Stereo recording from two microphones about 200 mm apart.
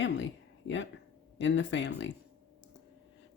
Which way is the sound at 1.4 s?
65° left (ahead or behind).